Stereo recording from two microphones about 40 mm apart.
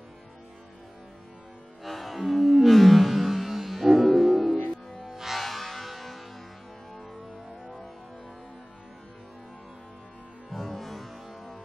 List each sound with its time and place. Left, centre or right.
1.8 s music: centre
5.4 s music: centre
10.5 s music: centre